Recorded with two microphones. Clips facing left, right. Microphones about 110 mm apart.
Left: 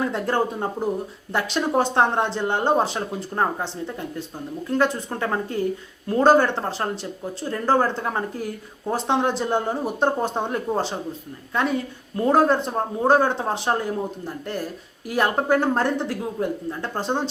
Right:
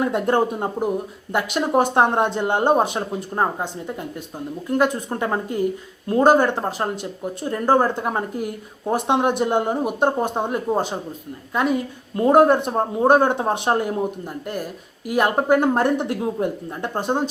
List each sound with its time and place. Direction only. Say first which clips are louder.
0.0 s speech: right 4 dB; 15° right (ahead or behind)